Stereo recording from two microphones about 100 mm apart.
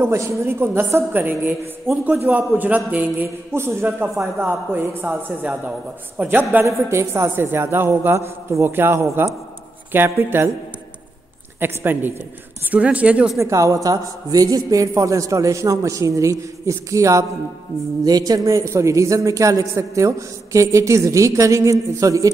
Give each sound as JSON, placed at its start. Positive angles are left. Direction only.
{"t": 0.0, "sound": "a woman's voice", "side_deg": -25}
{"t": 6.6, "sound": "a woman's voice", "side_deg": -30}
{"t": 11.6, "sound": "a woman's voice", "side_deg": -20}
{"t": 13.4, "sound": "a woman's voice", "side_deg": -30}